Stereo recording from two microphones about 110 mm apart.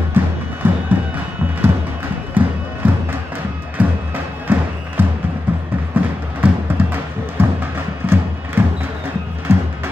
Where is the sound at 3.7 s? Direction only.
15° right (ahead or behind).